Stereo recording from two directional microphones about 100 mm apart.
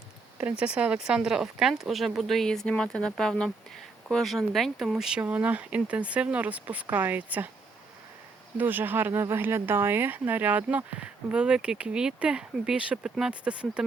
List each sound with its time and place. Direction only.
0.3 s speech: 15° right (ahead or behind)
8.5 s speech: 20° right (ahead or behind)